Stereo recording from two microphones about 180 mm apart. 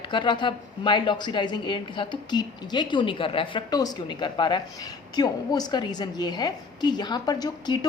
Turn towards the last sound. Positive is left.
turn(degrees=20)  # may be behind; listen again after turning